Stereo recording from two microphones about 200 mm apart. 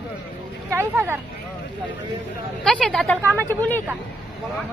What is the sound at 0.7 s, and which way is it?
Speech, 10° right (ahead or behind).